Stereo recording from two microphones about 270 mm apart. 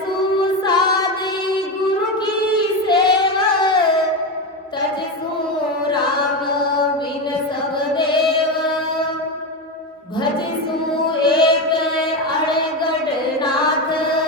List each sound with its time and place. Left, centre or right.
0.6 s music: centre
2.8 s child singing: centre
11.3 s child singing: centre